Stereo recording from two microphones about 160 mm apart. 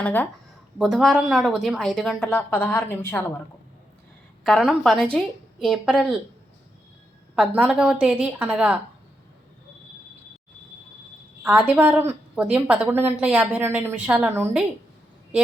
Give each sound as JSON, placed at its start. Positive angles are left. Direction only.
{"t": 0.0, "sound": "speech", "side_deg": 10}
{"t": 0.8, "sound": "speech", "side_deg": 0}
{"t": 4.4, "sound": "speech", "side_deg": 0}
{"t": 7.3, "sound": "a woman's voice", "side_deg": -5}
{"t": 11.4, "sound": "a woman's voice", "side_deg": -10}